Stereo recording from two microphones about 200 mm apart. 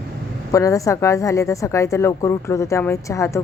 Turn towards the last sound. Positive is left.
turn(degrees=15)  # may be behind; listen again after turning